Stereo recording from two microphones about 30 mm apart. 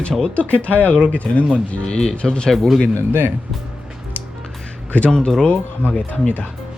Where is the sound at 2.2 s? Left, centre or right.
Left.